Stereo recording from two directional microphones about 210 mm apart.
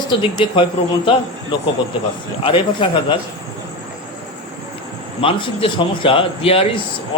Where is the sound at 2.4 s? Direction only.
25° left (ahead or behind).